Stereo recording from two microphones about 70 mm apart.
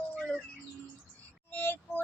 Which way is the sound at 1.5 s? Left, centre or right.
Left.